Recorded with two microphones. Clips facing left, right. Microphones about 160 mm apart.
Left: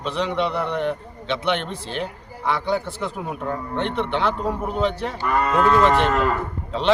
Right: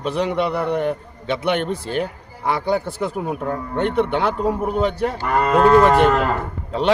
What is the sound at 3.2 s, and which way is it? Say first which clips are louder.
Speech: right 5 dB; 50° right (ahead or behind).